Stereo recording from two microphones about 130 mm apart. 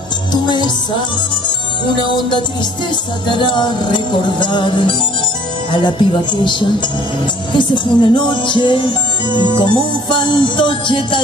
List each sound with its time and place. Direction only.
0.3 s music: 35° left (ahead or behind)
2.0 s music: 35° left (ahead or behind)
7.5 s music: 35° left (ahead or behind)